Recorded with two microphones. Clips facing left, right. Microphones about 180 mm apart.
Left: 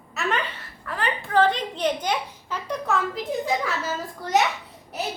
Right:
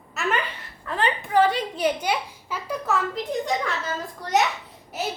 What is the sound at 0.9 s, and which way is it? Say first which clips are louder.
A child's voice: right 2 dB; 20° right (ahead or behind).